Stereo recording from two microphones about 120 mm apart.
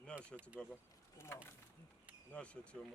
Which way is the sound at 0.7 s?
20° left (ahead or behind).